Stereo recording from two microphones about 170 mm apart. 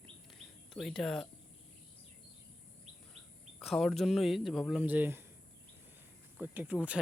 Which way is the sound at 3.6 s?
Centre (ahead or behind).